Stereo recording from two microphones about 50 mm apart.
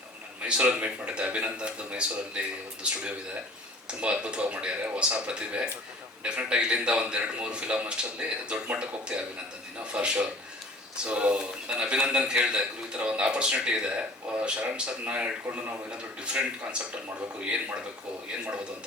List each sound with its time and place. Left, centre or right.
0.4 s a man's voice: right
4.0 s a man's voice: right